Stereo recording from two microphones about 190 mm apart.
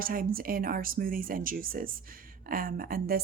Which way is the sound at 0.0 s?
50° right (ahead or behind).